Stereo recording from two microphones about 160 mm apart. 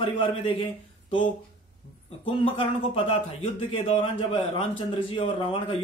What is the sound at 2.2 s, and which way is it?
A man's voice, 35° left (ahead or behind).